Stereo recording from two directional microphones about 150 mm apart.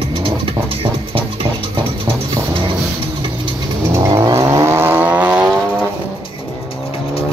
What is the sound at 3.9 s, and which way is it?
Vehicle, 20° right (ahead or behind).